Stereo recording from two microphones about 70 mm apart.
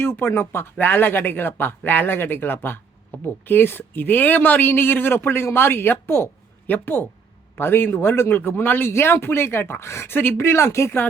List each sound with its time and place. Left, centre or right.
0.0 s speech: left